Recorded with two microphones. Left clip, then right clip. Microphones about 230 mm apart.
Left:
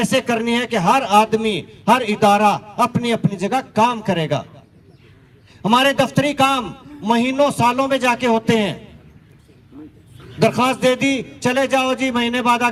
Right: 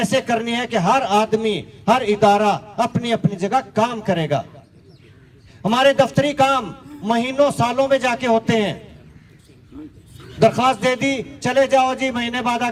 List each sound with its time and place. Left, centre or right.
0.0 s a man's voice: left
5.6 s a man's voice: left
9.7 s a sound: right
10.4 s a man's voice: left